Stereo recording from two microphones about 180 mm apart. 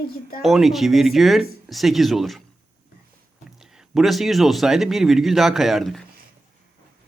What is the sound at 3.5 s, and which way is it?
Speech, 5° right (ahead or behind).